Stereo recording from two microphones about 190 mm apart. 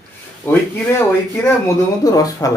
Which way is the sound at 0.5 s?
10° left (ahead or behind).